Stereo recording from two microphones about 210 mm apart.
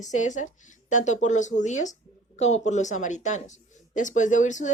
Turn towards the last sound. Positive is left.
turn(degrees=35)  # may be behind; listen again after turning